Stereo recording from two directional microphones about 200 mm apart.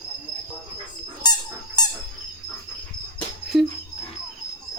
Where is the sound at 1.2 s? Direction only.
20° left (ahead or behind).